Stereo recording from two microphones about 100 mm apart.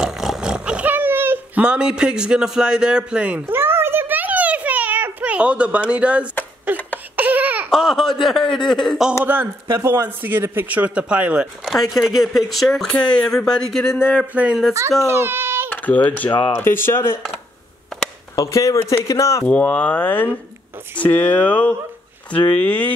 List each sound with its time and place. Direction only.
0.0 s a sound: 5° right (ahead or behind)
7.2 s baby cry: 15° right (ahead or behind)
7.7 s speech: 5° left (ahead or behind)
9.2 s a man's voice: 20° right (ahead or behind)
11.6 s speech: centre (ahead or behind)
12.9 s speech: 10° left (ahead or behind)
14.1 s speech: 10° right (ahead or behind)
14.7 s a child's voice: 30° right (ahead or behind)
15.7 s speech: 15° left (ahead or behind)
18.3 s speech: 35° left (ahead or behind)
19.4 s speech: 10° left (ahead or behind)